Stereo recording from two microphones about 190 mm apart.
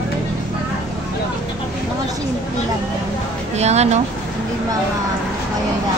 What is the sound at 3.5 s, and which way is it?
Speech, 35° right (ahead or behind).